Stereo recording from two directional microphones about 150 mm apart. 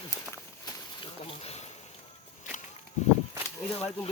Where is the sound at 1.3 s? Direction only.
40° left (ahead or behind).